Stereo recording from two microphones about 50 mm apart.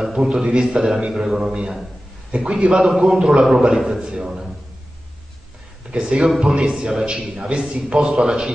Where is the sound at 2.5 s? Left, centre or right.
Centre.